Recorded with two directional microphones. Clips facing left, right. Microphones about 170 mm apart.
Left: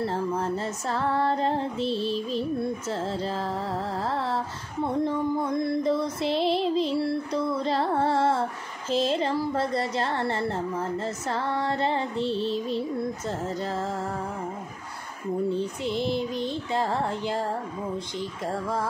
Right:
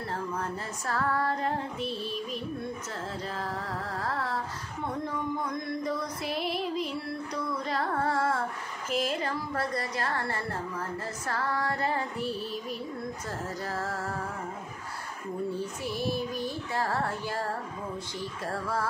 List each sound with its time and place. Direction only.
0.0 s female singing: 30° left (ahead or behind)
4.8 s music: 30° left (ahead or behind)
8.9 s female singing: 25° left (ahead or behind)
15.5 s female singing: 20° left (ahead or behind)